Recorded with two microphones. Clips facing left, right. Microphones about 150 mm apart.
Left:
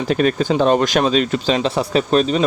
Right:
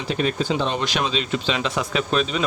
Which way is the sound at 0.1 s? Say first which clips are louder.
Left 5 dB; 55° left (ahead or behind).